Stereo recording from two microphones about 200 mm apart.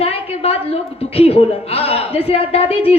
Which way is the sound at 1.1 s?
30° left (ahead or behind).